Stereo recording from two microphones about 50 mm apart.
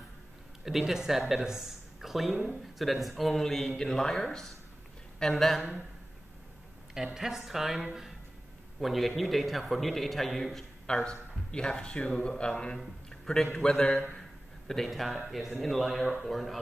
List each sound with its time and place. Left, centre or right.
0.7 s speech: centre
7.2 s speech: centre
10.9 s a man's voice: centre
14.7 s speech: centre